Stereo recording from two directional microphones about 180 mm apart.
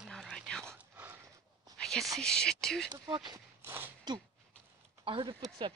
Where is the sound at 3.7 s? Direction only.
10° right (ahead or behind).